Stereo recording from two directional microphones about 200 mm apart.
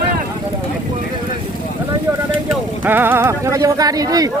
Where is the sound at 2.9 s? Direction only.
10° right (ahead or behind).